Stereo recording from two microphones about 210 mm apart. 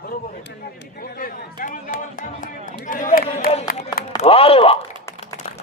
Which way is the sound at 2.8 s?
35° left (ahead or behind).